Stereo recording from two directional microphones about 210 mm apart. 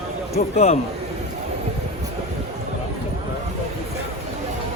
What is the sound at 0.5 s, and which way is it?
Speech, 30° left (ahead or behind).